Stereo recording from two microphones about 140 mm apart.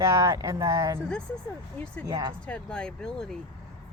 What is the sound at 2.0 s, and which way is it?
Speech, 30° right (ahead or behind).